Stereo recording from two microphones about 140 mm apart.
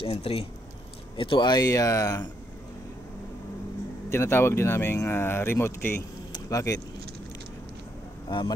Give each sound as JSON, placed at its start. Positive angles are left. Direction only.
{"t": 0.0, "sound": "speech", "side_deg": 45}
{"t": 4.1, "sound": "speech", "side_deg": 20}
{"t": 6.3, "sound": "vehicle", "side_deg": 25}
{"t": 8.3, "sound": "speech", "side_deg": 30}